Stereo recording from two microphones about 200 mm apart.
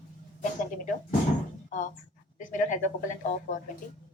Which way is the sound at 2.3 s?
40° left (ahead or behind).